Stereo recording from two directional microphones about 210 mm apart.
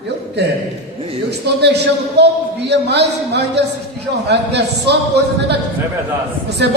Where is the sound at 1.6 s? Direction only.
55° right (ahead or behind).